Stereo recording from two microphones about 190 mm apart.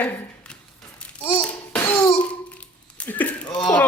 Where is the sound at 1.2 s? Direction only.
10° left (ahead or behind).